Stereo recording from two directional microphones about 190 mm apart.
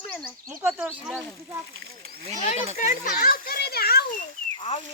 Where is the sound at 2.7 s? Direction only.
40° left (ahead or behind).